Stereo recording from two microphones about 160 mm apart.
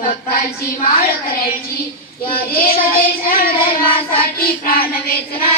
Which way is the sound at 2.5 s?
70° left (ahead or behind).